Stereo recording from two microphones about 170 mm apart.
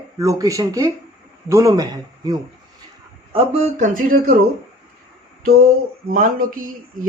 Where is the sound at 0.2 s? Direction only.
20° right (ahead or behind).